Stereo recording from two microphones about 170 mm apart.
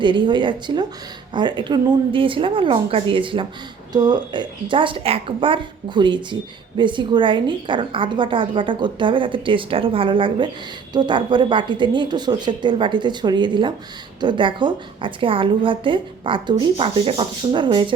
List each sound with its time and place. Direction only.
0.0 s a woman's voice: 30° right (ahead or behind)